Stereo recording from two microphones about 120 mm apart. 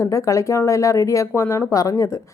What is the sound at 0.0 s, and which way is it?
A woman's voice, 25° left (ahead or behind).